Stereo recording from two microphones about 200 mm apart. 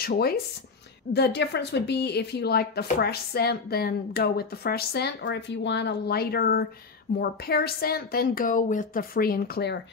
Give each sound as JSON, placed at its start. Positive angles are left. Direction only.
{"t": 0.0, "sound": "a woman's voice", "side_deg": 50}